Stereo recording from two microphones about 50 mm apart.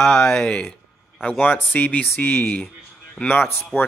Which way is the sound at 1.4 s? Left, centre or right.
Left.